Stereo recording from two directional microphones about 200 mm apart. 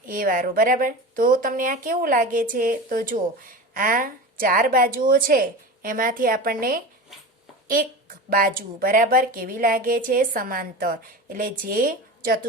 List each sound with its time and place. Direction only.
0.0 s a woman's voice: 45° right (ahead or behind)